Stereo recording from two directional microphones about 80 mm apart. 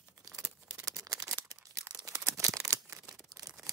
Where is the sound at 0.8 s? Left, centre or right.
Right.